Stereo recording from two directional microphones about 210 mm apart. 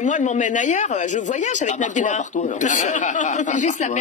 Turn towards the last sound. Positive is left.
turn(degrees=35)  # may be behind; listen again after turning